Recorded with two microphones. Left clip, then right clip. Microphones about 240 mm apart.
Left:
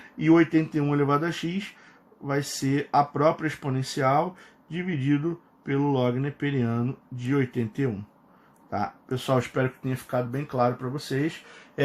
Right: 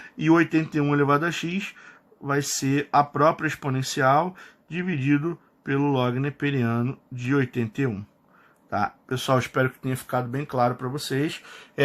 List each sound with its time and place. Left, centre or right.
0.2 s speech: centre